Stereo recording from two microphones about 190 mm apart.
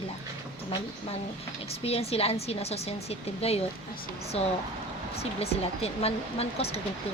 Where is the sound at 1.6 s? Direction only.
30° left (ahead or behind).